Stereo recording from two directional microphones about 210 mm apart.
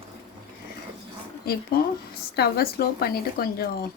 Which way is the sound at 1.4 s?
45° left (ahead or behind).